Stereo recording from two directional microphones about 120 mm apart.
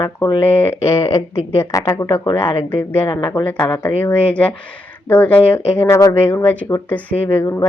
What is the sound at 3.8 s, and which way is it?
Speech, 15° left (ahead or behind).